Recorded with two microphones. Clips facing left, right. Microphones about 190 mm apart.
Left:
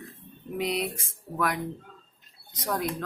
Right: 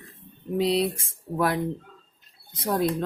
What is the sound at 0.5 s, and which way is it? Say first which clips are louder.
A woman's voice: right 6 dB; 30° right (ahead or behind).